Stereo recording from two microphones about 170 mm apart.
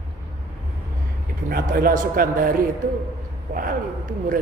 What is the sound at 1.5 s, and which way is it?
A man's voice, 60° right (ahead or behind).